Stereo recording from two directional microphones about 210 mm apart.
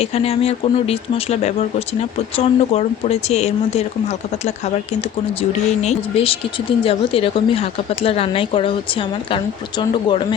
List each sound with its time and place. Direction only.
0.0 s speech: 30° left (ahead or behind)
5.4 s speech: 30° left (ahead or behind)